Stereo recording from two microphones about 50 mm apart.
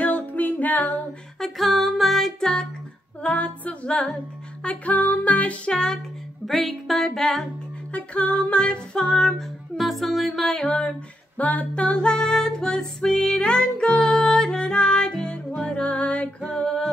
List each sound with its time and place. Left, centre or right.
0.0 s music: left
1.4 s music: centre
3.2 s music: left
4.6 s music: left
5.7 s music: centre
6.4 s music: centre
7.9 s music: left; by 10.7 s centre
11.3 s music: left